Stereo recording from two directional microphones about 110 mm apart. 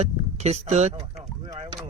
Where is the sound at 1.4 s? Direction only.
35° right (ahead or behind).